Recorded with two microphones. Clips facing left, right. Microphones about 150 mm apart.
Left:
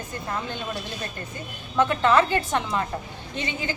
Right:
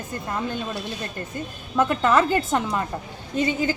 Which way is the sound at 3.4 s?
40° right (ahead or behind).